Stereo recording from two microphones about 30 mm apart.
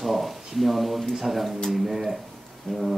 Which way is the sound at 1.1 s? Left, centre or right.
Centre.